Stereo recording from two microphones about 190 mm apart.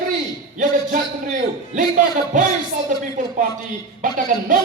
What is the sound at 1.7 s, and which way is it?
A man's voice, 45° right (ahead or behind).